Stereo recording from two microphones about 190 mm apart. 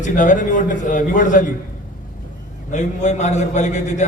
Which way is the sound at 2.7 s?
40° left (ahead or behind).